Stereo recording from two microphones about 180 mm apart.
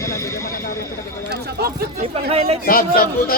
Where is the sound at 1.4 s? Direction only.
60° right (ahead or behind).